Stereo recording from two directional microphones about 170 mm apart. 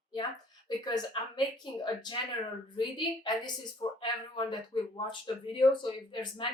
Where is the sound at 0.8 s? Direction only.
25° left (ahead or behind).